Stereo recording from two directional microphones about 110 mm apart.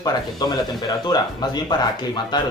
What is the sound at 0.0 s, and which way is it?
Speech, 35° left (ahead or behind).